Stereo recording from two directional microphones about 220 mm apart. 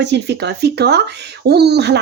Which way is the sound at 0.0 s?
50° right (ahead or behind).